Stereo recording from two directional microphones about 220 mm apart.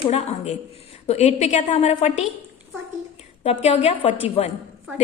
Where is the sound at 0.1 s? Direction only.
30° left (ahead or behind).